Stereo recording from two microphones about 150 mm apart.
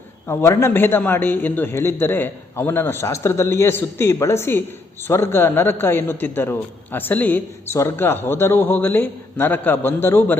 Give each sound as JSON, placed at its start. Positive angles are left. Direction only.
{"t": 0.3, "sound": "a man's voice", "side_deg": 15}